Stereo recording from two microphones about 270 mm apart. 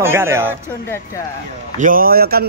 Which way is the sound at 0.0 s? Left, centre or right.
Centre.